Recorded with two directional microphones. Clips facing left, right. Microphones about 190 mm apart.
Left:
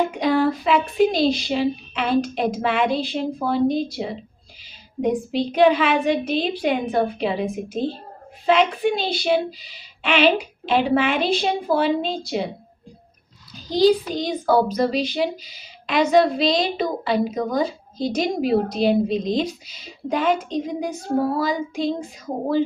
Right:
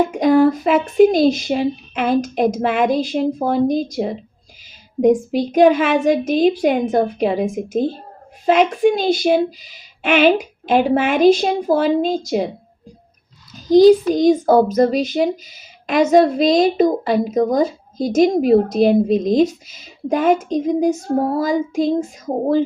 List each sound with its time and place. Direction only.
0.1 s a woman's voice: 45° right (ahead or behind)
13.7 s a woman's voice: 45° right (ahead or behind)